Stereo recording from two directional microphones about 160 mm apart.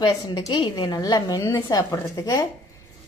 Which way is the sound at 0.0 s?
25° left (ahead or behind).